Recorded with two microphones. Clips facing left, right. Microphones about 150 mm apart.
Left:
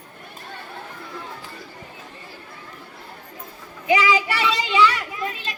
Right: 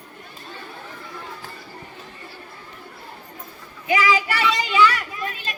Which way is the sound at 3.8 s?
20° left (ahead or behind).